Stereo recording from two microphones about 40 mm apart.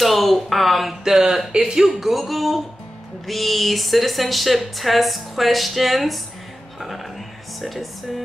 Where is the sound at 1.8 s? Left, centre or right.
Centre.